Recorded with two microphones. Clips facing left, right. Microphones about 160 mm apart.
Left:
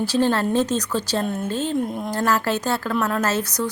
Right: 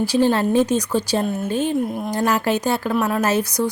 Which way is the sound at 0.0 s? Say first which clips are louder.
Right 3 dB; 15° right (ahead or behind).